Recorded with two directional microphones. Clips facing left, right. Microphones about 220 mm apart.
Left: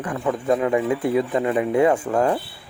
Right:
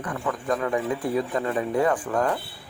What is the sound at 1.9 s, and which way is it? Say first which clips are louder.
Speech: left 5 dB; 25° left (ahead or behind).